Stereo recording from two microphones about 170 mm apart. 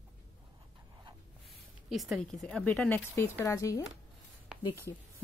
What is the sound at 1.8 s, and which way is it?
Speech, 5° right (ahead or behind).